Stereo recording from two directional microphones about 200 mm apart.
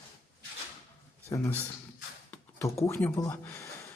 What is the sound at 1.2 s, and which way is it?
Speech, 10° left (ahead or behind).